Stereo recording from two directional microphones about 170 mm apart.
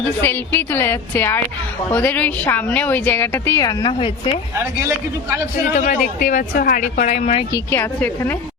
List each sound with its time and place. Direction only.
0.2 s speech: 15° left (ahead or behind); by 4.1 s 30° left (ahead or behind)
4.5 s a man's voice: 15° right (ahead or behind)
5.7 s speech: 50° left (ahead or behind)
7.5 s speech: 15° left (ahead or behind)